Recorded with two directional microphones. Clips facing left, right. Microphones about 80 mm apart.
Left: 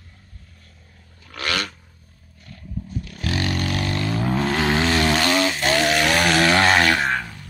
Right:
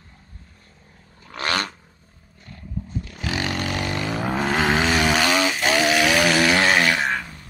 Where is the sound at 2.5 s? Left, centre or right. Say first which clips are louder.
Even; right; by 6.4 s centre.